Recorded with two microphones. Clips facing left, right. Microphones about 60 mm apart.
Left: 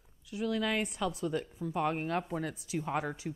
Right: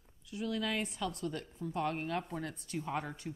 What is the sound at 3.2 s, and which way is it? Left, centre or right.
Speech, left.